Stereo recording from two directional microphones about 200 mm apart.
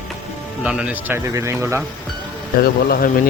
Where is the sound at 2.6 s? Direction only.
45° left (ahead or behind).